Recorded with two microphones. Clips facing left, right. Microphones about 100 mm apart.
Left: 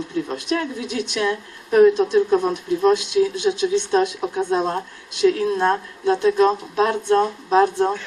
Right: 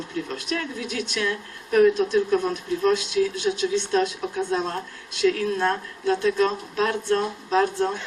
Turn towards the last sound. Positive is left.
turn(degrees=20)  # may be behind; listen again after turning